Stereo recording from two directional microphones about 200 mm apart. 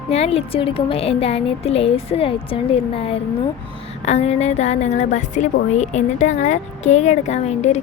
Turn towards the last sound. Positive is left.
turn(degrees=35)  # may be behind; listen again after turning